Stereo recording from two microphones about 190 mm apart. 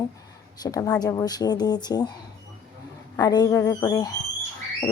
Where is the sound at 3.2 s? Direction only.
20° left (ahead or behind).